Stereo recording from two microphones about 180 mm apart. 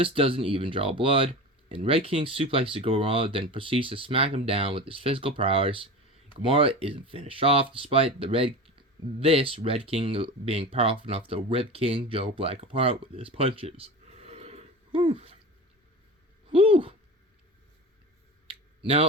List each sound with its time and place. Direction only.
0.0 s speech: 30° right (ahead or behind)
16.5 s speech: 30° right (ahead or behind)